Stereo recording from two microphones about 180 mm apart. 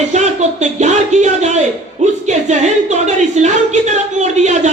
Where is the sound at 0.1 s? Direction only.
40° right (ahead or behind).